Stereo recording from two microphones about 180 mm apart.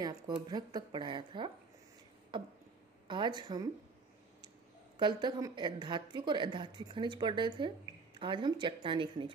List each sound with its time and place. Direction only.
0.0 s a woman's voice: 25° right (ahead or behind)
3.1 s a woman's voice: 25° right (ahead or behind)
4.9 s a woman's voice: 25° right (ahead or behind)